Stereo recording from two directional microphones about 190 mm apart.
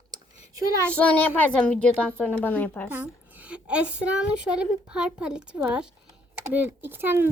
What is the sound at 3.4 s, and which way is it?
A woman's voice, 5° right (ahead or behind).